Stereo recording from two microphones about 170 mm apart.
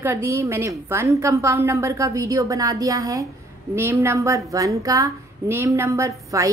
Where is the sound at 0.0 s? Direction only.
15° right (ahead or behind).